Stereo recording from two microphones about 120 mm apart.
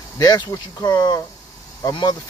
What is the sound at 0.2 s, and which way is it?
Speech, 30° left (ahead or behind).